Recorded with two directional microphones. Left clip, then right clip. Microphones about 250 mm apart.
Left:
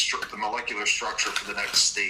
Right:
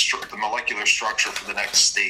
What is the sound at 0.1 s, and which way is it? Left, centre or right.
Speech, right.